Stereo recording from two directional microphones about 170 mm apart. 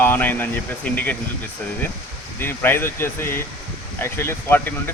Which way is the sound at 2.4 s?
15° left (ahead or behind).